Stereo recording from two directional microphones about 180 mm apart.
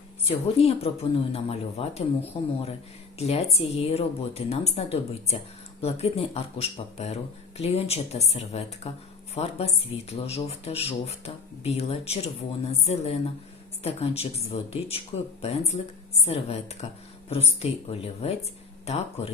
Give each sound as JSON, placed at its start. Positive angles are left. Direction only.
{"t": 0.3, "sound": "speech", "side_deg": 35}